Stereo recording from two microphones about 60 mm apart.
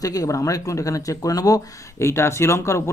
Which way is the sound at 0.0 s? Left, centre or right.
Left.